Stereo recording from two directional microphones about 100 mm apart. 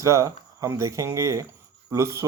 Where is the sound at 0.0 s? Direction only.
30° right (ahead or behind).